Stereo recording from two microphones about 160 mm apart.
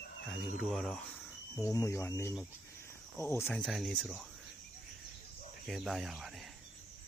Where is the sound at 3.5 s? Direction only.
Centre (ahead or behind).